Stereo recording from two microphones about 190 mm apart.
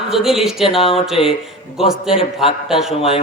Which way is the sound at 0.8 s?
30° left (ahead or behind).